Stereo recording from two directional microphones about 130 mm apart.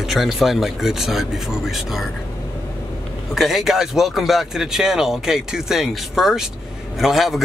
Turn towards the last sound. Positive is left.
turn(degrees=0)  # may be behind; listen again after turning